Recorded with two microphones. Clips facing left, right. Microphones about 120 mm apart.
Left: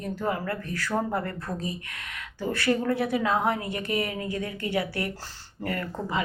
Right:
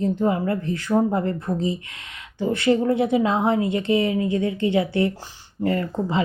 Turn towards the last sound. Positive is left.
turn(degrees=-25)  # may be behind; listen again after turning